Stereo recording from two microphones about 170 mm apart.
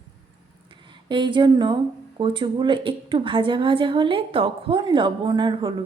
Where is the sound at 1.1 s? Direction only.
30° right (ahead or behind).